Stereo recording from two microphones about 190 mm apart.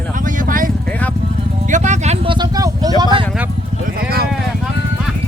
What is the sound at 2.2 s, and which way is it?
Vehicle, 25° right (ahead or behind).